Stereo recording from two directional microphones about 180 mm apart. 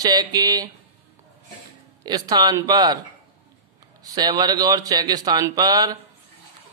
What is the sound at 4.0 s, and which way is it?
Speech, 20° right (ahead or behind).